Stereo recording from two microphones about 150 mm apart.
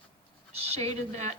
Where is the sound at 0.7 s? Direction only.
45° right (ahead or behind).